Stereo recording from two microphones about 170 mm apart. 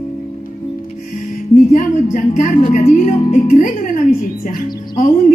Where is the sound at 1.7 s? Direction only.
45° left (ahead or behind).